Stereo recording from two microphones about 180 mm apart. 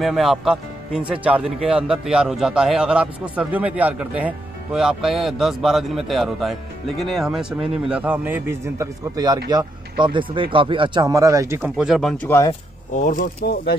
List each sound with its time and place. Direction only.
0.0 s a man's voice: centre (ahead or behind)
11.7 s speech: centre (ahead or behind)
12.3 s speech: 15° left (ahead or behind)
12.9 s speech: 45° left (ahead or behind)